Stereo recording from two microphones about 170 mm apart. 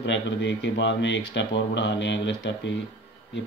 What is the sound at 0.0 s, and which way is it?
Speech, 90° left.